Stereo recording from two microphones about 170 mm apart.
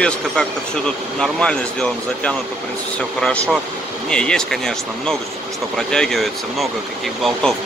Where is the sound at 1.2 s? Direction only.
5° left (ahead or behind).